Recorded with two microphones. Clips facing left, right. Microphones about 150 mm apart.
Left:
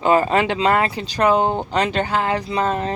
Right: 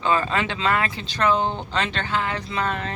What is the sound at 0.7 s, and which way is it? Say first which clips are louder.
Speech: left 5 dB; 35° left (ahead or behind).